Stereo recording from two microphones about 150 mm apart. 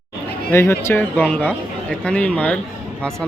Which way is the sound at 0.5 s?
15° left (ahead or behind).